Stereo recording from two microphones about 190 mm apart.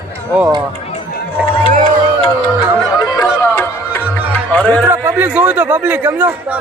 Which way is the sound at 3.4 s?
10° left (ahead or behind).